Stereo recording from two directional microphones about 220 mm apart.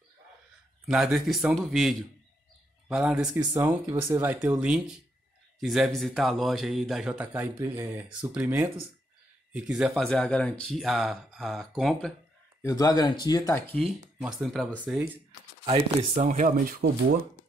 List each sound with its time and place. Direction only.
0.8 s speech: centre (ahead or behind)
12.6 s speech: 15° left (ahead or behind); by 15.0 s centre (ahead or behind)
15.6 s speech: 25° right (ahead or behind); by 16.9 s 40° right (ahead or behind)